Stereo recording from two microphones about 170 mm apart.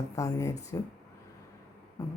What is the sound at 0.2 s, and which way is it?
Speech, 20° left (ahead or behind).